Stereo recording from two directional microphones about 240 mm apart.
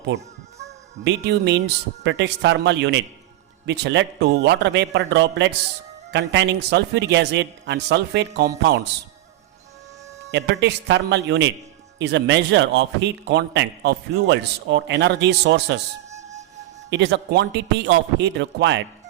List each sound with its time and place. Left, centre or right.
1.0 s a man's voice: right
10.3 s a man's voice: right
16.9 s a man's voice: right